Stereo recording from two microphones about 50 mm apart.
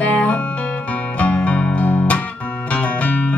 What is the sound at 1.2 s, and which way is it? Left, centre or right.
Music, left.